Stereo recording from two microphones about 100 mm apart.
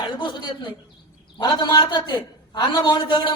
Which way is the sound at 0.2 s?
50° left (ahead or behind).